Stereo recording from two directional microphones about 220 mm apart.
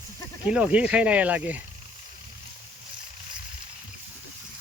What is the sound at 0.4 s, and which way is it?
Speech, 5° right (ahead or behind).